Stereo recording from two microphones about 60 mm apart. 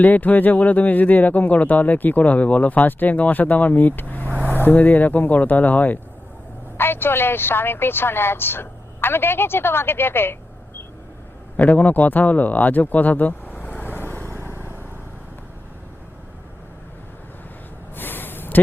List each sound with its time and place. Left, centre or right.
0.0 s speech: left
6.7 s a woman's voice: left
11.5 s speech: left
14.4 s vehicle: right
17.9 s a sound: left